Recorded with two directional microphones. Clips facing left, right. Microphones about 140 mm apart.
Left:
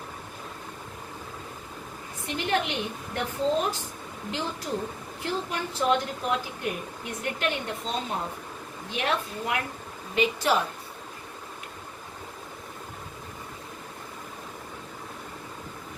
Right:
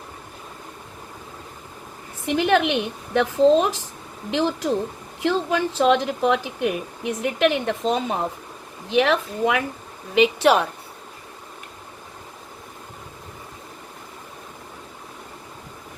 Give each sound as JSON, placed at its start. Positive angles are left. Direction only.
{"t": 2.2, "sound": "speech", "side_deg": -90}
{"t": 10.2, "sound": "a woman's voice", "side_deg": -70}